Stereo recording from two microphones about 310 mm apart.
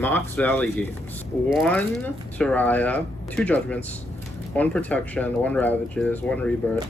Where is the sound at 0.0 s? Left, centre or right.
Centre.